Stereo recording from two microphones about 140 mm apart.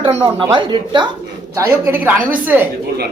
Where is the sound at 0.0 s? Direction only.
40° right (ahead or behind).